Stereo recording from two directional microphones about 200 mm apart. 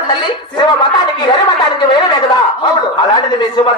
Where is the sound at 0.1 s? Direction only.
20° left (ahead or behind).